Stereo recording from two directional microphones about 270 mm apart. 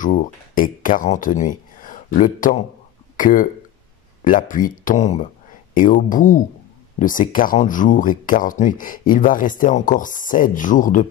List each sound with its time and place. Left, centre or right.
0.0 s speech: left